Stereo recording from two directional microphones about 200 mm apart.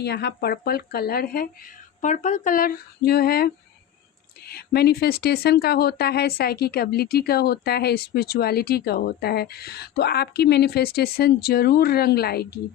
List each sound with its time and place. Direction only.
0.0 s speech: 55° left (ahead or behind)